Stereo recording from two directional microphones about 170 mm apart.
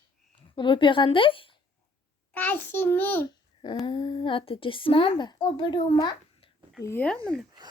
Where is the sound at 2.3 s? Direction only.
10° left (ahead or behind).